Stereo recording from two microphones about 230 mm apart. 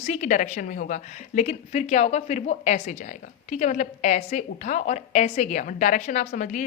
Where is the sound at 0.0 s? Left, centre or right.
Left.